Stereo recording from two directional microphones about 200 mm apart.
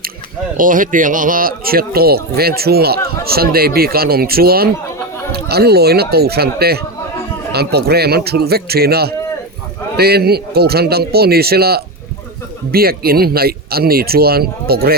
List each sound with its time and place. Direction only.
0.5 s speech: 40° right (ahead or behind)